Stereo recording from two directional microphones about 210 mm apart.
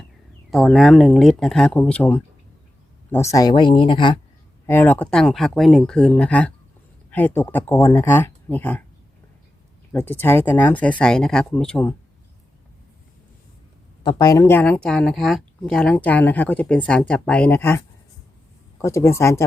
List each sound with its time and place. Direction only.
0.5 s speech: centre (ahead or behind); by 4.2 s 25° left (ahead or behind)
4.6 s speech: 10° left (ahead or behind)
9.9 s speech: 10° left (ahead or behind)
14.0 s speech: 20° left (ahead or behind)